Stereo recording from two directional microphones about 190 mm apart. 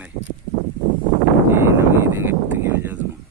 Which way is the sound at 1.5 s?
15° right (ahead or behind).